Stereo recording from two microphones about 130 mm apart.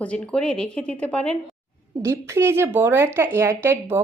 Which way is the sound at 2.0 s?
20° right (ahead or behind).